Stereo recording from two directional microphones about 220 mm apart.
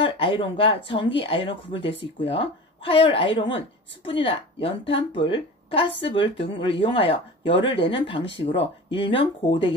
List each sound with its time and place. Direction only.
0.0 s a woman's voice: 25° left (ahead or behind)